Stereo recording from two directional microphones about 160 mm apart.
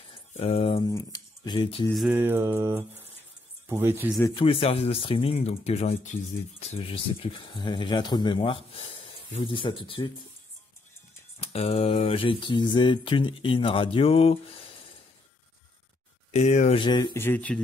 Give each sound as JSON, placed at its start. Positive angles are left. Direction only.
{"t": 0.4, "sound": "speech", "side_deg": 35}
{"t": 2.0, "sound": "mantra", "side_deg": -15}
{"t": 3.6, "sound": "speech", "side_deg": -15}
{"t": 4.3, "sound": "speech", "side_deg": 35}
{"t": 11.4, "sound": "speech", "side_deg": 40}
{"t": 16.3, "sound": "speech", "side_deg": 45}
{"t": 16.8, "sound": "speech", "side_deg": 30}
{"t": 17.2, "sound": "speech", "side_deg": 10}